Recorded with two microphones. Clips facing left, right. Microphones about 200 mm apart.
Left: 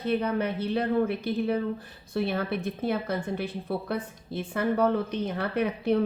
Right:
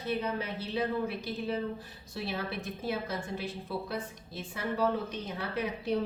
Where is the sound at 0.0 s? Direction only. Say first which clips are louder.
Left 7 dB; 60° left (ahead or behind).